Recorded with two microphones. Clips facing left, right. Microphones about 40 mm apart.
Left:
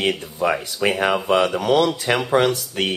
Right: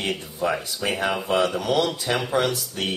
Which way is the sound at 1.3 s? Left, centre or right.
Left.